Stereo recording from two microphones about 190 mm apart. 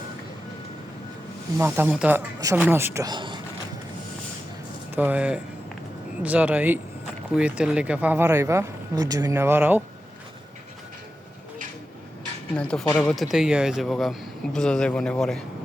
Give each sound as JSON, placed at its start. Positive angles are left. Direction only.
{"t": 1.5, "sound": "speech", "side_deg": -10}
{"t": 4.9, "sound": "speech", "side_deg": -5}
{"t": 12.5, "sound": "speech", "side_deg": 5}